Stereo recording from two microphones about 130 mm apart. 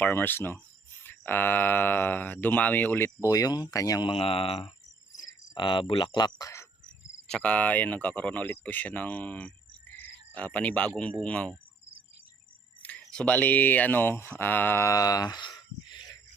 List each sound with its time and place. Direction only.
0.0 s speech: 15° left (ahead or behind)
4.1 s speech: 45° left (ahead or behind)
5.2 s cricket: 35° left (ahead or behind)
7.3 s speech: 10° left (ahead or behind)
9.9 s cricket: 15° left (ahead or behind)
10.9 s speech: 10° left (ahead or behind)
12.8 s speech: 10° left (ahead or behind); by 16.1 s 35° left (ahead or behind)